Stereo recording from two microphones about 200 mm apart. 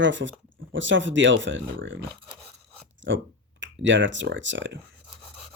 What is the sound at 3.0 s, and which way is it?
Speech, 65° right (ahead or behind).